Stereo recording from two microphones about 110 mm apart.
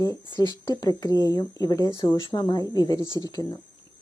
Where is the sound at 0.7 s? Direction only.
35° left (ahead or behind).